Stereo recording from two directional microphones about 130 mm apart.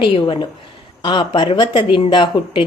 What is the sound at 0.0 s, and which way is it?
A woman's voice, 40° left (ahead or behind).